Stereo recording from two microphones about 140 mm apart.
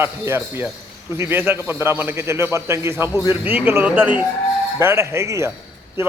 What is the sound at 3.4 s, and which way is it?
A man's voice, 10° right (ahead or behind).